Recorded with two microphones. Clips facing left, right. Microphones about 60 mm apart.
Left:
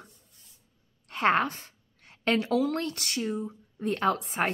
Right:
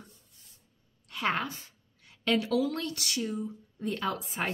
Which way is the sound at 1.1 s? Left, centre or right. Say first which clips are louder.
Left 6 dB; left.